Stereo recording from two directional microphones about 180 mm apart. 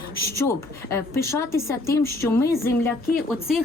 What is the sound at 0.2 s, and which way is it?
A woman's voice, 15° left (ahead or behind).